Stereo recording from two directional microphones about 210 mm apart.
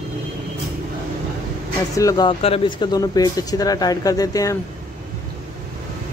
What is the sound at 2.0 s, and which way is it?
Speech, 20° left (ahead or behind).